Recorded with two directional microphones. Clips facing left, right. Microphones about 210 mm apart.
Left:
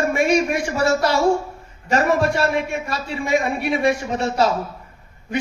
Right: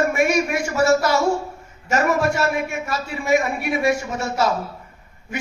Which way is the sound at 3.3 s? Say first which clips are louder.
Right 1 dB; 30° left (ahead or behind).